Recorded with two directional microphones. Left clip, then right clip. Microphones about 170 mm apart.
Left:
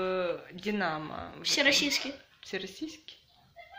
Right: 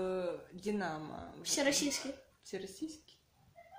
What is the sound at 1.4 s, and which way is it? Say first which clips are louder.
Speech: left 8 dB; 35° right (ahead or behind).